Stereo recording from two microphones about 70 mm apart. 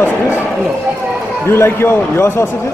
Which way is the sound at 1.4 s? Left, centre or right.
Left.